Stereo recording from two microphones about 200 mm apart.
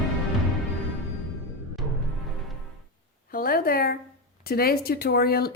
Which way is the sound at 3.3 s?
45° left (ahead or behind).